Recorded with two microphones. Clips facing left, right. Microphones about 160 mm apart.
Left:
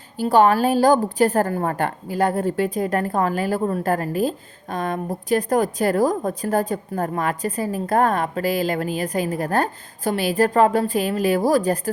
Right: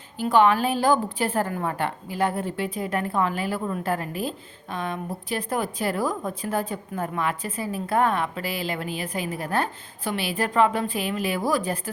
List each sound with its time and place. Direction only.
0.2 s a woman's voice: 40° left (ahead or behind)